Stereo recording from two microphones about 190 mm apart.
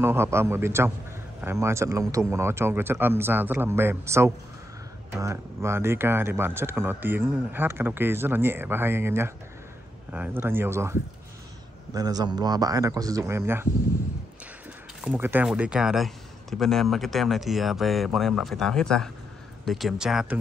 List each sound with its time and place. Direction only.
0.0 s speech: 10° right (ahead or behind)
15.0 s speech: 10° right (ahead or behind)